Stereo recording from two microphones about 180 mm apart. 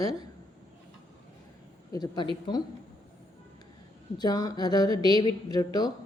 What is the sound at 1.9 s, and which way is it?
Speech, 20° left (ahead or behind).